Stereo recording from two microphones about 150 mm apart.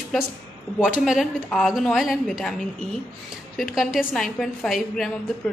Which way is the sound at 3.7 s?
Centre (ahead or behind).